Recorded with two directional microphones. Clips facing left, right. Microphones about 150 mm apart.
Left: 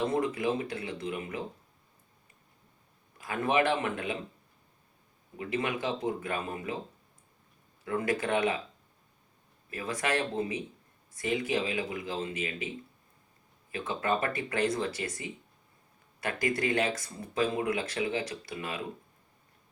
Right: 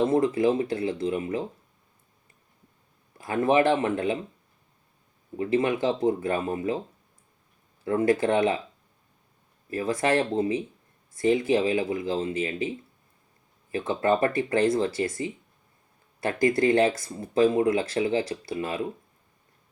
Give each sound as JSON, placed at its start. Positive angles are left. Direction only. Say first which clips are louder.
{"t": 0.0, "sound": "speech", "louder": "right 7 dB", "side_deg": -30}
{"t": 3.2, "sound": "speech", "louder": "right 6 dB", "side_deg": -30}
{"t": 5.4, "sound": "speech", "louder": "right 8 dB", "side_deg": -30}
{"t": 7.9, "sound": "speech", "louder": "right 7 dB", "side_deg": -30}
{"t": 9.6, "sound": "speech", "louder": "right 8 dB", "side_deg": -30}
{"t": 13.7, "sound": "speech", "louder": "right 7 dB", "side_deg": -30}